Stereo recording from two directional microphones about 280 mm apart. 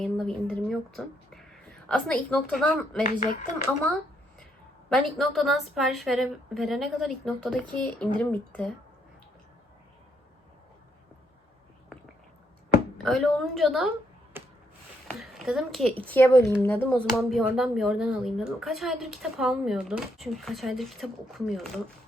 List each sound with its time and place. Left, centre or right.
0.0 s a sound: centre
1.9 s speech: centre
3.0 s speech: left
4.9 s speech: centre
13.0 s speech: centre
14.3 s a sound: centre
15.2 s speech: centre